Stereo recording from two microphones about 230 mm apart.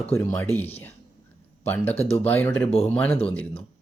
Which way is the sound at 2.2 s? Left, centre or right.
Centre.